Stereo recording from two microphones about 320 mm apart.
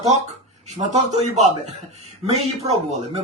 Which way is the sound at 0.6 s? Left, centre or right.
Right.